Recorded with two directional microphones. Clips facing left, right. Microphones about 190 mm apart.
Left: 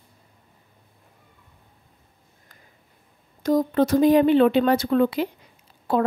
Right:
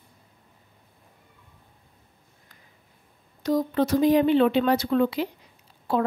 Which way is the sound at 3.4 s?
50° left (ahead or behind).